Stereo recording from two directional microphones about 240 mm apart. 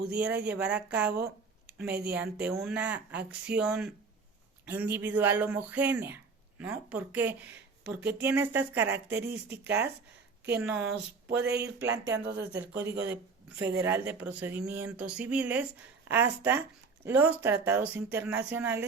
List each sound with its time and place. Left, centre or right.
0.0 s speech: centre
11.3 s speech: right
11.8 s speech: centre
12.2 s speech: right
12.5 s speech: centre